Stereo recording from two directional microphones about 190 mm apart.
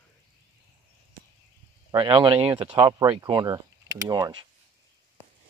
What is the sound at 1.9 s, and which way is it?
Speech, 25° right (ahead or behind).